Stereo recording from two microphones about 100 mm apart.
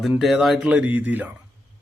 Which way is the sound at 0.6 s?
15° right (ahead or behind).